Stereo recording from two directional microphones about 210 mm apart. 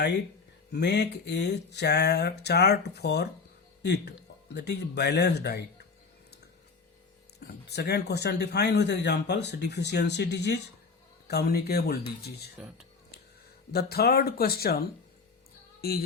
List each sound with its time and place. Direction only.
0.7 s speech: 55° left (ahead or behind)
7.3 s speech: 50° left (ahead or behind)
13.7 s speech: 50° left (ahead or behind)
15.8 s music: 45° left (ahead or behind)